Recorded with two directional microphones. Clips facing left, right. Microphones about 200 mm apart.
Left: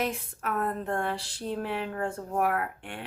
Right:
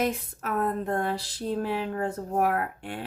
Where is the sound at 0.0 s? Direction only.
40° right (ahead or behind).